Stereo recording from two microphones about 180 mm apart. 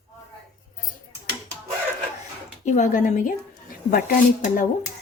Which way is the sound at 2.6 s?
45° left (ahead or behind).